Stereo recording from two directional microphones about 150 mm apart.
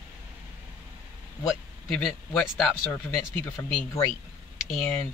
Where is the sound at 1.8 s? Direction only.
5° left (ahead or behind).